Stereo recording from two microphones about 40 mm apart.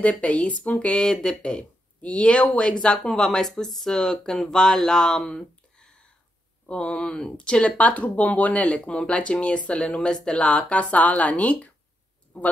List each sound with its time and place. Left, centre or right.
0.5 s speech: left
1.6 s speech: left
7.7 s speech: left